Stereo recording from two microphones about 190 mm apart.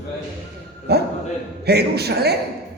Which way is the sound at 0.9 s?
60° right (ahead or behind).